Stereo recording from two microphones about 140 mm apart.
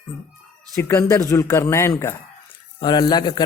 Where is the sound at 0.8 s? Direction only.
20° left (ahead or behind).